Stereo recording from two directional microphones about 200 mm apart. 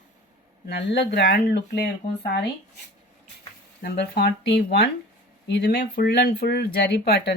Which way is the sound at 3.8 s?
50° left (ahead or behind).